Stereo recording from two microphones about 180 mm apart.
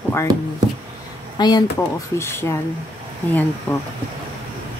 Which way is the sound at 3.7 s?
10° left (ahead or behind).